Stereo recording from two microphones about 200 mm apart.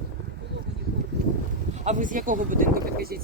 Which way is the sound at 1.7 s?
35° right (ahead or behind).